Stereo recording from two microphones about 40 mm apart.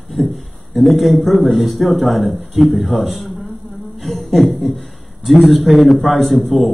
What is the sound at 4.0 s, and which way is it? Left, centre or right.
A man's voice, centre.